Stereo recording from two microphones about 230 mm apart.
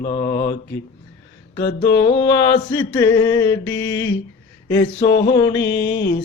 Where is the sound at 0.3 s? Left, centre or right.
Left.